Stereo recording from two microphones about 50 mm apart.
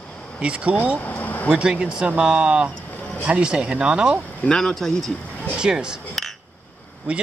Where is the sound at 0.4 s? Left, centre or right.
Right.